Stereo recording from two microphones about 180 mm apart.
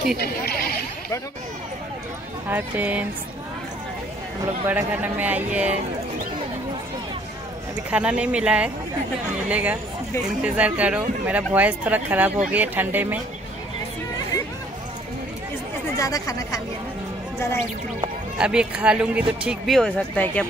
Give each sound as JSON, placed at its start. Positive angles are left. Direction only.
{"t": 0.2, "sound": "speech", "side_deg": 60}
{"t": 2.5, "sound": "speech", "side_deg": -10}
{"t": 4.6, "sound": "speech", "side_deg": -10}
{"t": 7.9, "sound": "speech", "side_deg": -5}
{"t": 16.0, "sound": "speech", "side_deg": 20}
{"t": 18.4, "sound": "speech", "side_deg": -5}